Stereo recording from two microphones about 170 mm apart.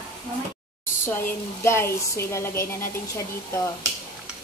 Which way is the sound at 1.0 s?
15° left (ahead or behind).